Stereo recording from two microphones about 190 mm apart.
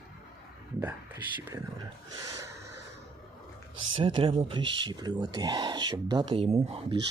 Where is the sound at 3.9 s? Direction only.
25° right (ahead or behind).